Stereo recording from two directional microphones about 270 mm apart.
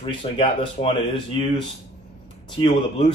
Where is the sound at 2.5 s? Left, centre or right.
Centre.